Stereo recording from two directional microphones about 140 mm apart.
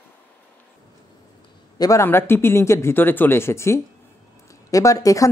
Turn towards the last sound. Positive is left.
turn(degrees=25)  # may be behind; listen again after turning